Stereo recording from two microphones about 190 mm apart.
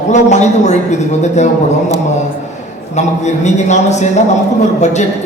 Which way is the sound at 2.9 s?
35° left (ahead or behind).